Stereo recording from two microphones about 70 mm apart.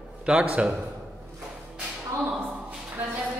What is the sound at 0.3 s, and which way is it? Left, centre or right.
Speech, centre.